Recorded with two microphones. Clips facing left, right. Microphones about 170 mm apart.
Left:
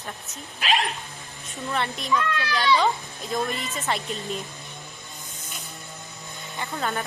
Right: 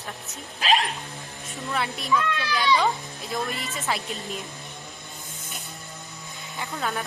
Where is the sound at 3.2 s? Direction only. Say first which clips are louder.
Left 3 dB; centre (ahead or behind).